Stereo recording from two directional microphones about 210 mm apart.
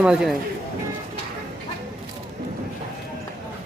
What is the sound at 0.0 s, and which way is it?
Speech, 5° right (ahead or behind).